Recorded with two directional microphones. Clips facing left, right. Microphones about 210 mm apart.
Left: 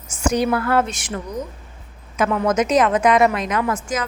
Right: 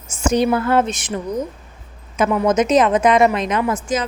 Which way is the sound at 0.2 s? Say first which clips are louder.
Right 2 dB; 25° right (ahead or behind).